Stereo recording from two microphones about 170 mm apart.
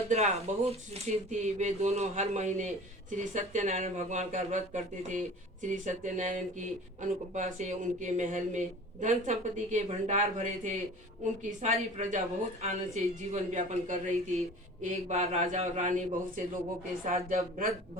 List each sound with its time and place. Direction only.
0.1 s speech: 40° right (ahead or behind)